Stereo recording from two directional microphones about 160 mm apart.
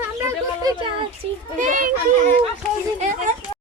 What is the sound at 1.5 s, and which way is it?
Children playing, 55° right (ahead or behind).